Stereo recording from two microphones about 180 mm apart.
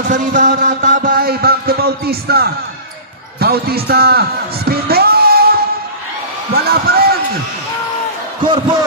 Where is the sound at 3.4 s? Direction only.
60° right (ahead or behind).